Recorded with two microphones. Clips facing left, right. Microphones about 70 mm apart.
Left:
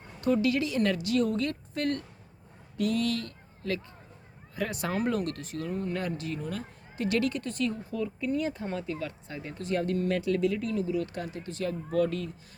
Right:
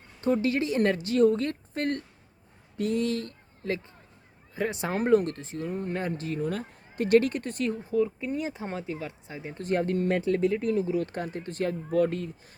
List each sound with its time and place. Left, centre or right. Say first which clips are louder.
0.4 s speech: right 2 dB; right
4.9 s speech: right 8 dB; right
7.7 s speech: right 7 dB; right
9.6 s speech: right 2 dB; right